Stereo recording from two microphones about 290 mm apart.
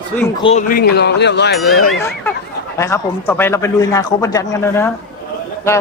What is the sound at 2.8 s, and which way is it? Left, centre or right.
A man's voice, centre.